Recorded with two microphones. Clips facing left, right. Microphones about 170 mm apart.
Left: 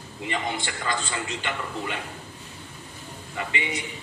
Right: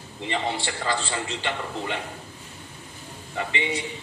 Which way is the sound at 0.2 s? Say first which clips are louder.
Right 2 dB; 25° right (ahead or behind).